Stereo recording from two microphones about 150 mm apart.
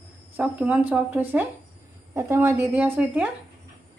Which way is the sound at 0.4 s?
10° right (ahead or behind).